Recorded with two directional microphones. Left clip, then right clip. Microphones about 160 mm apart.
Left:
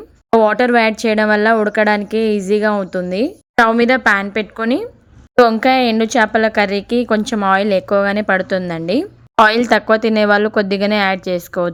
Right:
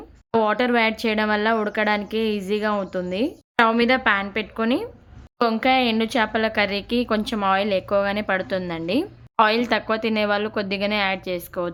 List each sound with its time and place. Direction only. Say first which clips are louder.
0.3 s a woman's voice: left 8 dB; 35° left (ahead or behind)